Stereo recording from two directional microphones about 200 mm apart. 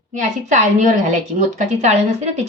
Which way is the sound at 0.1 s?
40° right (ahead or behind).